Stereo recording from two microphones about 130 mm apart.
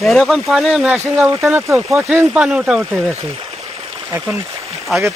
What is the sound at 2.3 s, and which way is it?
Speech, 5° right (ahead or behind).